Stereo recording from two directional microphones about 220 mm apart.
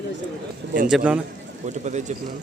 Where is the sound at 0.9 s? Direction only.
5° right (ahead or behind).